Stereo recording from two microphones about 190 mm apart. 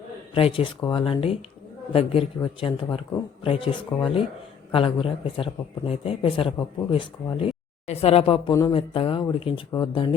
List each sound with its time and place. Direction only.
0.3 s speech: 30° left (ahead or behind)